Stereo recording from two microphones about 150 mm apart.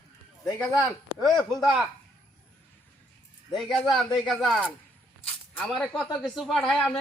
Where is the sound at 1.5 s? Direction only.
Centre (ahead or behind).